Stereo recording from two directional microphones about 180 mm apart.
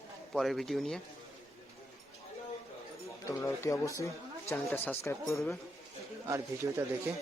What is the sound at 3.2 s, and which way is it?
Speech, 15° left (ahead or behind).